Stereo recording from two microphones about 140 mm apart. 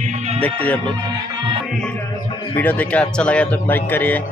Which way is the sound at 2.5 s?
10° left (ahead or behind).